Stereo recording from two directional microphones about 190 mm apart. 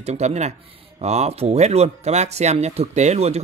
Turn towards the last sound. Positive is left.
turn(degrees=-35)  # may be behind; listen again after turning